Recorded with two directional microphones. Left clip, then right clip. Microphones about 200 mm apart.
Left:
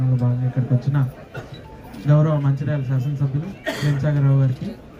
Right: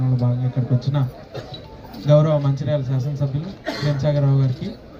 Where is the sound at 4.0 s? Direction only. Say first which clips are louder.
Right 3 dB; 20° right (ahead or behind).